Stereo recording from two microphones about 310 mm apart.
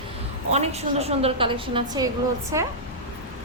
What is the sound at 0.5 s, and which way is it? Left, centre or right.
A woman's voice, centre.